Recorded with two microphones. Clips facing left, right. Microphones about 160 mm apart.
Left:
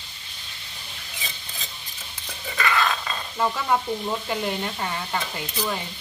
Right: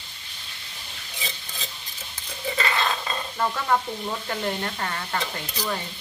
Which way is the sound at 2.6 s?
30° right (ahead or behind).